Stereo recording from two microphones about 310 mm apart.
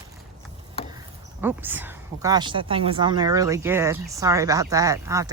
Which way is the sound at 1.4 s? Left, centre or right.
Centre.